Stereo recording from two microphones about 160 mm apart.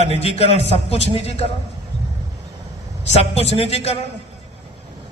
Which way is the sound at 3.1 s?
40° left (ahead or behind).